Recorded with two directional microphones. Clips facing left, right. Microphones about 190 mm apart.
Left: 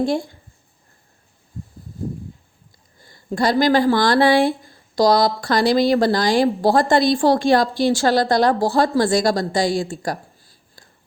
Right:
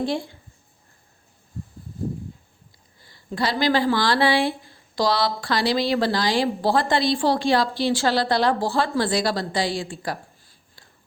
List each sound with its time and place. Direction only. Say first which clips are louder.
0.0 s speech: left 5 dB; 45° left (ahead or behind)
3.0 s a woman's voice: left 5 dB; 45° left (ahead or behind)
10.8 s a sound: left 4 dB; 45° left (ahead or behind)